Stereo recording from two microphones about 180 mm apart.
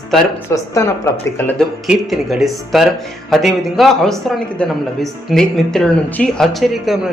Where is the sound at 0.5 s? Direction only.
20° left (ahead or behind).